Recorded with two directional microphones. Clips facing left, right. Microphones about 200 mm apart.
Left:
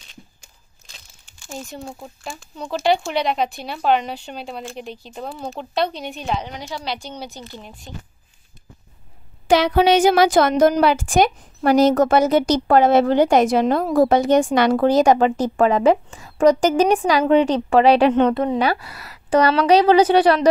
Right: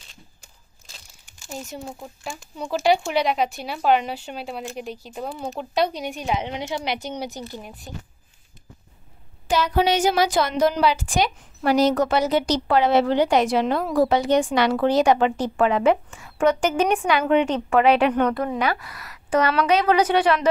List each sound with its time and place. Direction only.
1.5 s speech: 5° right (ahead or behind)
6.4 s speech: 25° right (ahead or behind)
9.5 s a woman's voice: 85° left; by 20.4 s 35° left (ahead or behind)